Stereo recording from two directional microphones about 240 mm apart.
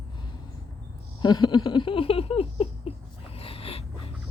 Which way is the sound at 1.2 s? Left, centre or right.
Centre.